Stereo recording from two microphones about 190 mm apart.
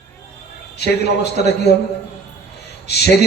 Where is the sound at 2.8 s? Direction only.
60° left (ahead or behind).